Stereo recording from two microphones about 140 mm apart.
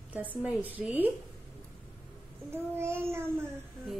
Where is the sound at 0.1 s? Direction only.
10° right (ahead or behind).